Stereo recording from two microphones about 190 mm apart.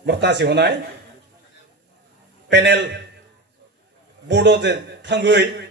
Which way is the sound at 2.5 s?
70° right (ahead or behind).